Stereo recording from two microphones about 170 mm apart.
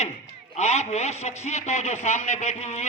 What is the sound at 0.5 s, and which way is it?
A man's voice, 40° left (ahead or behind).